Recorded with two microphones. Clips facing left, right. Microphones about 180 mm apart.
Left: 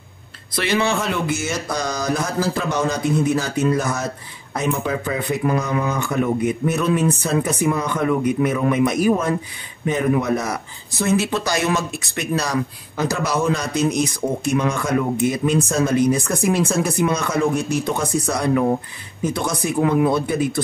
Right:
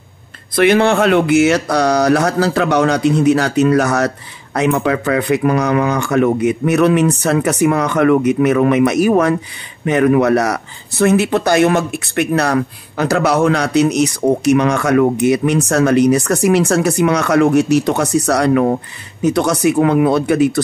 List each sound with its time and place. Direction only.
0.6 s speech: 60° right (ahead or behind); by 20.6 s 75° right (ahead or behind)